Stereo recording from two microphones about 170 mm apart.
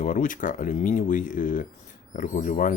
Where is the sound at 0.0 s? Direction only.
50° left (ahead or behind).